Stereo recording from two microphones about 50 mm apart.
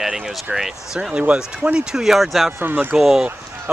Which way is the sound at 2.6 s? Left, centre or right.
Right.